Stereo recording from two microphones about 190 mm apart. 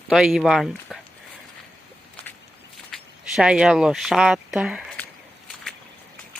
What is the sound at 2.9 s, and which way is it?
Speech, centre (ahead or behind).